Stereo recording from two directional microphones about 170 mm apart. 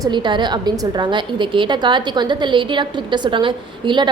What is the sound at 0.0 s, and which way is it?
A woman's voice, 25° right (ahead or behind).